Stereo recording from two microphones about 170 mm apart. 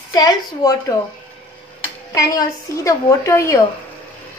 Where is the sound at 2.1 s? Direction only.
20° left (ahead or behind).